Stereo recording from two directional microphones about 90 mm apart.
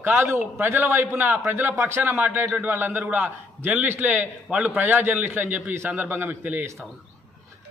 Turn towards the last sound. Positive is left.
turn(degrees=-30)  # may be behind; listen again after turning